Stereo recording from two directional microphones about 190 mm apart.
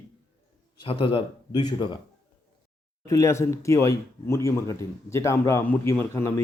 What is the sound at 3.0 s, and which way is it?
Speech, 15° left (ahead or behind).